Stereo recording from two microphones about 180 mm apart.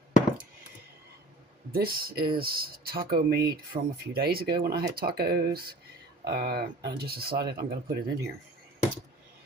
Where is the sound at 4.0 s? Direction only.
60° right (ahead or behind).